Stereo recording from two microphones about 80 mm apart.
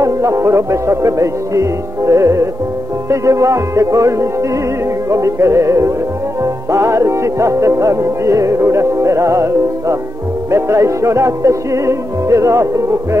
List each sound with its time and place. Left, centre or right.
0.0 s music: right